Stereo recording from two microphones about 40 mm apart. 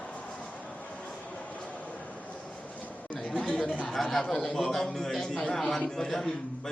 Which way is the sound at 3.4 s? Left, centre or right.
Left.